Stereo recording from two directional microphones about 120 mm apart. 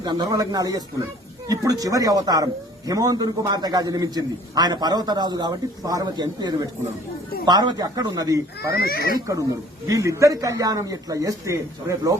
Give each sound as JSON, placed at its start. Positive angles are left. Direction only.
{"t": 0.0, "sound": "a man's voice", "side_deg": -35}